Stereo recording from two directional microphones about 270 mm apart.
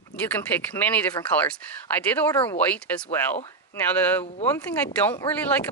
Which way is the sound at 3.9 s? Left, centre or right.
Centre.